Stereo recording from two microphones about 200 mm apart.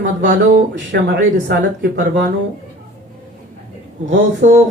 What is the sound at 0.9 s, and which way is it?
Speech, 55° right (ahead or behind).